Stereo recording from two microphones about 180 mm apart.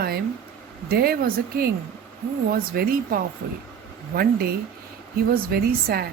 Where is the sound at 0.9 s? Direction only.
60° right (ahead or behind).